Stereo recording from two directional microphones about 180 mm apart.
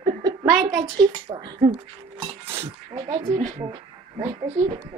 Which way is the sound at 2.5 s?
35° right (ahead or behind).